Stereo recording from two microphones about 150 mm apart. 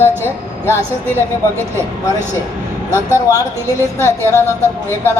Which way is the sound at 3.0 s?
20° left (ahead or behind).